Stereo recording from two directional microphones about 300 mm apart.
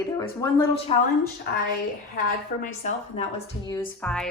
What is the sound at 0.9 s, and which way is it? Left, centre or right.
Speech, left.